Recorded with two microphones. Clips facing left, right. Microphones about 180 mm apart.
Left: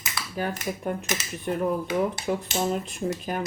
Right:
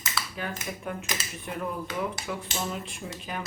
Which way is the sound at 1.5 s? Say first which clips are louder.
Left 8 dB; 40° left (ahead or behind).